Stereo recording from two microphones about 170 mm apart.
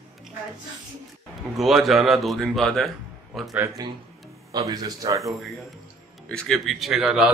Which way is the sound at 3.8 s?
20° right (ahead or behind).